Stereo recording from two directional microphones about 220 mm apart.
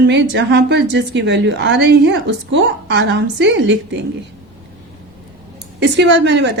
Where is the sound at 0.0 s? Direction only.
55° right (ahead or behind).